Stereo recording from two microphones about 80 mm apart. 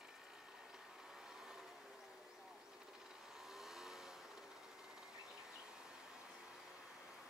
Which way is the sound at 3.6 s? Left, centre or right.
Centre.